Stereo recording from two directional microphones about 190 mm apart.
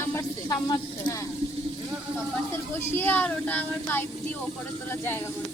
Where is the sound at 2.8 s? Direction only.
10° left (ahead or behind).